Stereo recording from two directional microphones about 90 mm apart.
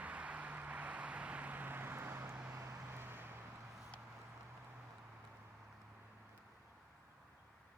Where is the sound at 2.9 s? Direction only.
25° right (ahead or behind).